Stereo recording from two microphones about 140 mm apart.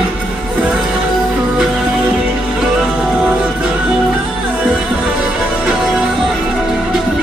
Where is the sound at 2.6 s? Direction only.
5° right (ahead or behind).